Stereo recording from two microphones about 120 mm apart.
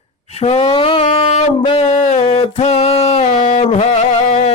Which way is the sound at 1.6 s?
55° left (ahead or behind).